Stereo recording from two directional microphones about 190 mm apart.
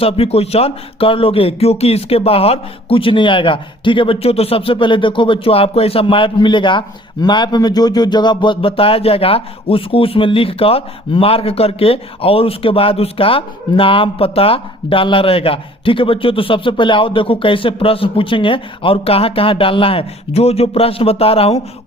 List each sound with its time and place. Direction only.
0.0 s speech: 30° left (ahead or behind)